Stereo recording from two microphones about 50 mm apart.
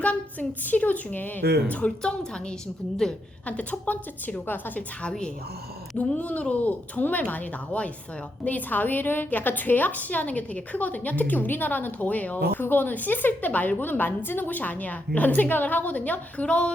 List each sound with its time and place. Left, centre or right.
0.0 s a woman's voice: left
3.0 s a woman's voice: centre
3.4 s a woman's voice: left
6.0 s a woman's voice: left